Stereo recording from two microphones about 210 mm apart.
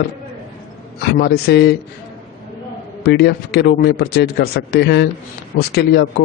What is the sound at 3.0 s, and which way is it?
A man's voice, 50° left (ahead or behind).